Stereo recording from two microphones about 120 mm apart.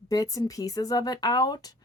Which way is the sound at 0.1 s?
30° left (ahead or behind).